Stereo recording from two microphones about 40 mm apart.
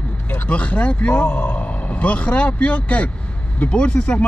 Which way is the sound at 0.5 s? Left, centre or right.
Left.